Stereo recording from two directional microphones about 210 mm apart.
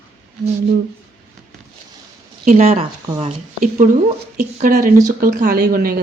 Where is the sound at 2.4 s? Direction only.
35° right (ahead or behind).